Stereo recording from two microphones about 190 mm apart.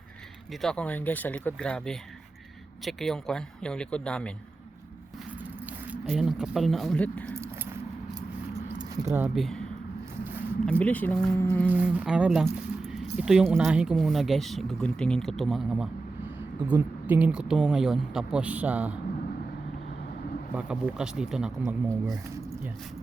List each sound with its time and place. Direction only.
0.5 s speech: 5° left (ahead or behind)
6.1 s speech: centre (ahead or behind)
7.3 s keys jangling: 15° right (ahead or behind)
9.2 s speech: centre (ahead or behind)
10.7 s speech: 5° left (ahead or behind)
11.7 s speech: 5° right (ahead or behind)
20.6 s speech: 5° right (ahead or behind)
21.8 s speech: 15° right (ahead or behind)